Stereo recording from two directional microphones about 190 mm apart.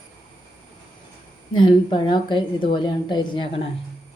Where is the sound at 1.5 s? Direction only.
25° left (ahead or behind).